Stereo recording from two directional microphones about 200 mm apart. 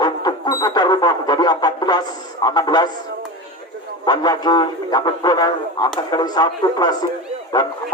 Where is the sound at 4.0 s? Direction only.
20° left (ahead or behind).